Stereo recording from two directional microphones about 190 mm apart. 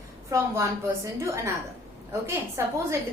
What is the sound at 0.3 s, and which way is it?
A woman's voice, 15° right (ahead or behind).